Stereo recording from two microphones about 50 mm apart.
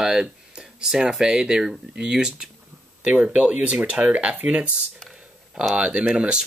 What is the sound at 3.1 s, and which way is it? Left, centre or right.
Speech, right.